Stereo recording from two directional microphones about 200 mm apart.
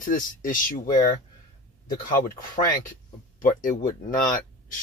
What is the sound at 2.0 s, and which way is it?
Speech, 40° left (ahead or behind).